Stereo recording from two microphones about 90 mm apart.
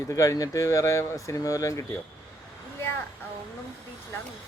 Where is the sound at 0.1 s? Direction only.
40° left (ahead or behind).